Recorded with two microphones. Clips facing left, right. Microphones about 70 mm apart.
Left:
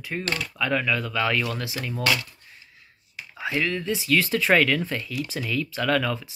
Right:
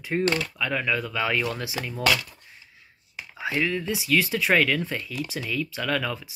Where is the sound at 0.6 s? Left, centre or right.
Centre.